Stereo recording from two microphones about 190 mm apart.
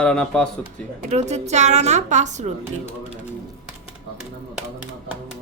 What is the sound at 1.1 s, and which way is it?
A woman's voice, 35° right (ahead or behind).